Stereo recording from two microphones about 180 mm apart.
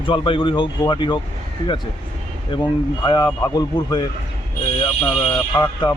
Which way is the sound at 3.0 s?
25° left (ahead or behind).